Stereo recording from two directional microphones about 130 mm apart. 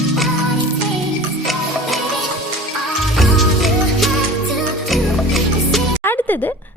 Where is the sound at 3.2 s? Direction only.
Centre (ahead or behind).